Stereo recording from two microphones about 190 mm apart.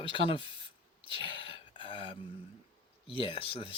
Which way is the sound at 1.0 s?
25° left (ahead or behind).